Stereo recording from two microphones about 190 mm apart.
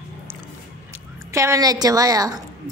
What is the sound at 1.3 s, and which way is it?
A woman's voice, 15° right (ahead or behind).